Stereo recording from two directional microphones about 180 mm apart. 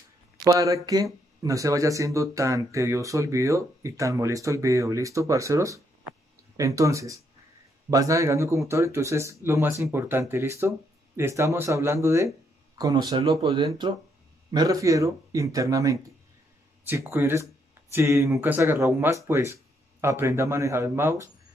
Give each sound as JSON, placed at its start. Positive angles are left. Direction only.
{"t": 0.4, "sound": "speech", "side_deg": -20}